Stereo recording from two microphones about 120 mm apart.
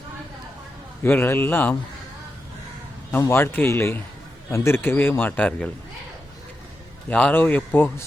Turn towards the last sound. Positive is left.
turn(degrees=15)  # may be behind; listen again after turning